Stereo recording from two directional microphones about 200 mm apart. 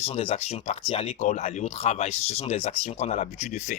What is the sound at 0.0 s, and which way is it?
Speech, 30° left (ahead or behind).